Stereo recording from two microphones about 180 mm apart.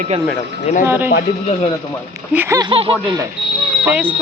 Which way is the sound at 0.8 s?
10° right (ahead or behind).